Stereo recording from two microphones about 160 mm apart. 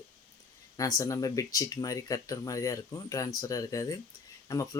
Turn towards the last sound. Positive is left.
turn(degrees=20)  # may be behind; listen again after turning